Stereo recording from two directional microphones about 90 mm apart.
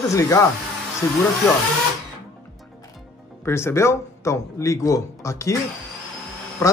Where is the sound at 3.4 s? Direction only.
30° left (ahead or behind).